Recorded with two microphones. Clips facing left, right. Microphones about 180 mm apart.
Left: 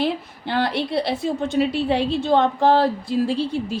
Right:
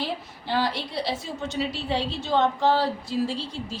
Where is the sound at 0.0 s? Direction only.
65° left (ahead or behind).